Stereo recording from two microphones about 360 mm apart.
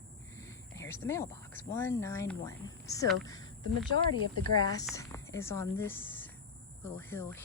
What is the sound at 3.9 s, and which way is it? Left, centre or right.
Speech, right.